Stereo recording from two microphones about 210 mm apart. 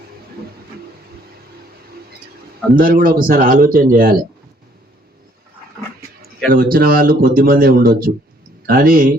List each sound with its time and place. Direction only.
2.7 s speech: 40° right (ahead or behind)
6.5 s speech: 45° right (ahead or behind)